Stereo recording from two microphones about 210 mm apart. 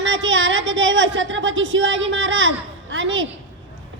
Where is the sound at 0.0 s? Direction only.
60° right (ahead or behind).